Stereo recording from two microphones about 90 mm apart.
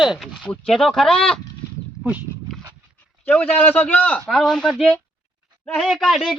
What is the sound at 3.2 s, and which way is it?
A man's voice, 20° left (ahead or behind).